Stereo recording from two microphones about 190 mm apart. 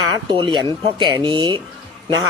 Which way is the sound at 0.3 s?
25° right (ahead or behind).